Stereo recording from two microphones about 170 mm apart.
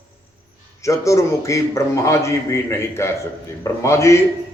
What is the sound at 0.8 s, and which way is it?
A man's voice, 20° left (ahead or behind).